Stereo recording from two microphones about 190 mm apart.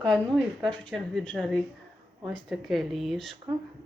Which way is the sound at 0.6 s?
5° left (ahead or behind).